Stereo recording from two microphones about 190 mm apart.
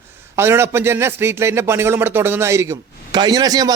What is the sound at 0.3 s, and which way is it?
Speech, 15° right (ahead or behind).